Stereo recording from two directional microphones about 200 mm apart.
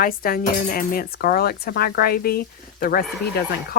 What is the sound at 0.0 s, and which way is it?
Speech, 45° left (ahead or behind).